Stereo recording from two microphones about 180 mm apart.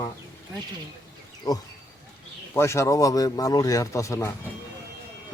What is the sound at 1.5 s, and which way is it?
Speech, 20° left (ahead or behind).